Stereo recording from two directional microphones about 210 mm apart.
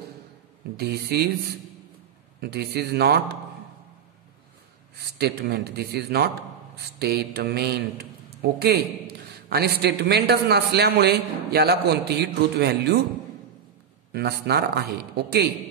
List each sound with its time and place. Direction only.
0.7 s a man's voice: 50° right (ahead or behind)
5.2 s a man's voice: 50° right (ahead or behind)
14.1 s a man's voice: 50° right (ahead or behind)